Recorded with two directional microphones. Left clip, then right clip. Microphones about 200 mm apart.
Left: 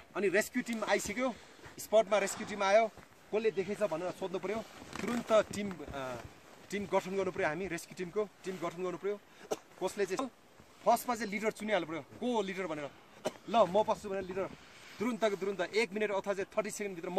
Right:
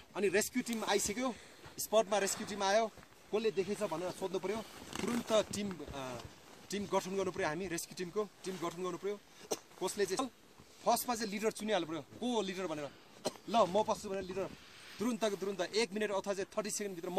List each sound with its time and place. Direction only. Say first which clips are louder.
0.1 s speech: left 2 dB; 20° left (ahead or behind)
4.9 s speech: left 1 dB; 45° right (ahead or behind)
5.3 s speech: left 4 dB; 20° left (ahead or behind)
6.7 s speech: left 2 dB; 20° left (ahead or behind)